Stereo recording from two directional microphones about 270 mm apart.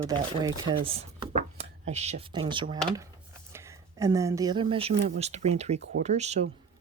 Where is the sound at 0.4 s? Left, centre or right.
Centre.